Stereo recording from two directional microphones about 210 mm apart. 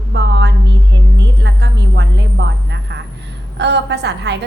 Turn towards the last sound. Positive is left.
turn(degrees=-55)  # may be behind; listen again after turning